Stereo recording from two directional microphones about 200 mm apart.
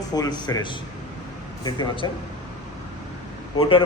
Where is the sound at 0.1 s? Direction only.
20° left (ahead or behind).